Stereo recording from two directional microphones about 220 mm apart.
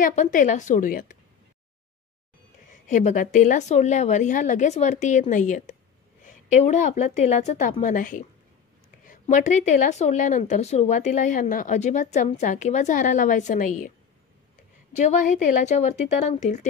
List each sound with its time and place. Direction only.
0.0 s speech: 35° left (ahead or behind)
2.9 s speech: 35° left (ahead or behind)